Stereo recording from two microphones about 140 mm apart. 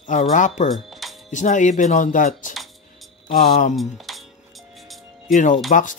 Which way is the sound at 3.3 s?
90° left.